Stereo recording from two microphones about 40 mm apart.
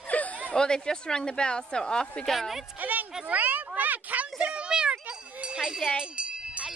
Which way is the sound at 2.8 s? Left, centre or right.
Right.